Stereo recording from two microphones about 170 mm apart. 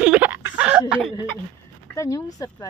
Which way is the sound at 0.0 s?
10° right (ahead or behind).